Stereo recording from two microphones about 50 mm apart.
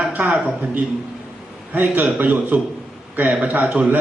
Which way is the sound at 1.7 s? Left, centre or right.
Right.